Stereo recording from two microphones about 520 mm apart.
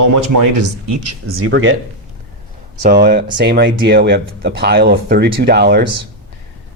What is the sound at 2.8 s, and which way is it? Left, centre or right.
Speech, centre.